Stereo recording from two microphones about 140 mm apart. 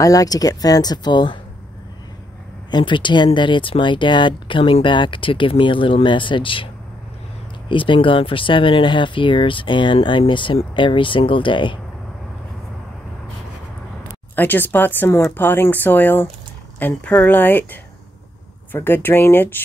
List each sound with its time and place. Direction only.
0.0 s speech: 25° left (ahead or behind)
2.7 s speech: 35° left (ahead or behind)
14.3 s speech: 15° left (ahead or behind)